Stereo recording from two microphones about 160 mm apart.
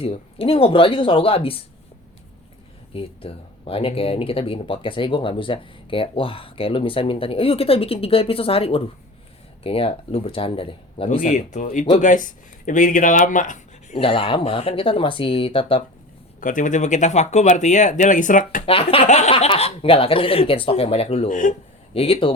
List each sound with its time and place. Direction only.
0.0 s speech: 35° left (ahead or behind)
2.9 s speech: 35° left (ahead or behind)
11.2 s speech: 50° left (ahead or behind)
14.0 s speech: 35° left (ahead or behind)
16.4 s speech: 55° left (ahead or behind)
18.6 s speech: 35° left (ahead or behind)
21.2 s speech: 55° left (ahead or behind)
21.9 s speech: 35° left (ahead or behind)